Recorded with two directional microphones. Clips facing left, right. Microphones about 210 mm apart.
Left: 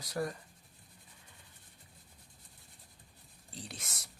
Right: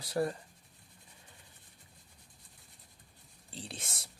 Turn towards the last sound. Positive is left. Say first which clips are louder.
# right 2 dB
turn(degrees=-30)  # may be behind; listen again after turning